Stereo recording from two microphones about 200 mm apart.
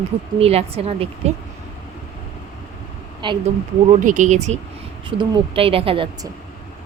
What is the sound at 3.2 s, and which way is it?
Speech, 20° right (ahead or behind).